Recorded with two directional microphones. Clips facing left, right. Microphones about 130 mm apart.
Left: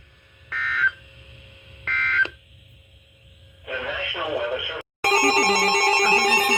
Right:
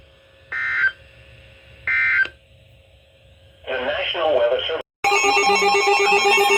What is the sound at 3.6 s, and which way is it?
Radio, 90° right.